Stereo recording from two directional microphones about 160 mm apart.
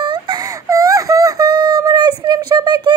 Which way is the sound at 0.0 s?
25° right (ahead or behind).